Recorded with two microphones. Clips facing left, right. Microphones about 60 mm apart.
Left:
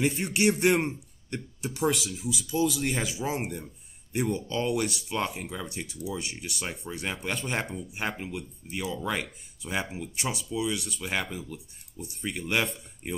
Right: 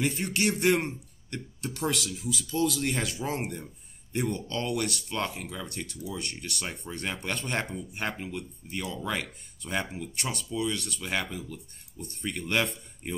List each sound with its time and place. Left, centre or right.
0.0 s speech: centre
1.3 s speech: centre